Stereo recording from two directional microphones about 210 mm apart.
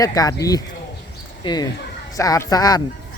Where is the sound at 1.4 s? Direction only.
20° left (ahead or behind).